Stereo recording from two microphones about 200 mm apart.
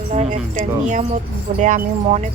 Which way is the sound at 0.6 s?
40° right (ahead or behind).